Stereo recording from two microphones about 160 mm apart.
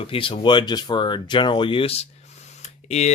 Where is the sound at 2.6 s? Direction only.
45° left (ahead or behind).